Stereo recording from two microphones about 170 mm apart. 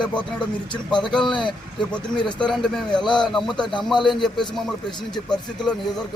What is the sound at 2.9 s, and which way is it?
Speech, 25° left (ahead or behind).